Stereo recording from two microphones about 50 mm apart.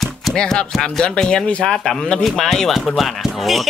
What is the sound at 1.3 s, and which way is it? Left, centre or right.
Speech, left.